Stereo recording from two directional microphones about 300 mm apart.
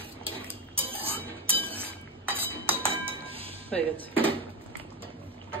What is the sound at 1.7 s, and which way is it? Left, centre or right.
Chink, centre.